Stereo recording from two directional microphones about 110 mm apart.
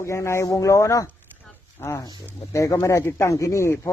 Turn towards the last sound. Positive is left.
turn(degrees=25)  # may be behind; listen again after turning